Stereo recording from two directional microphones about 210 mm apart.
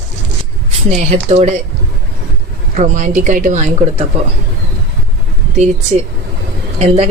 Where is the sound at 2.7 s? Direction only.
35° right (ahead or behind).